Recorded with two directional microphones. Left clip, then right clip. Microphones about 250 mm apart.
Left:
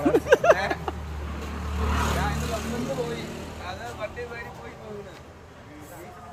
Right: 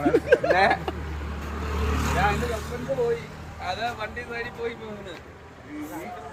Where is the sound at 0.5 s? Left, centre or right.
Right.